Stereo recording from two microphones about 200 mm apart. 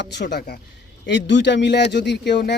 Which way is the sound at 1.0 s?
65° left (ahead or behind).